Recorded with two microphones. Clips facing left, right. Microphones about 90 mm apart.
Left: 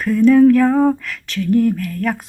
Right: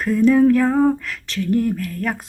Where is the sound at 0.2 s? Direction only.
15° right (ahead or behind).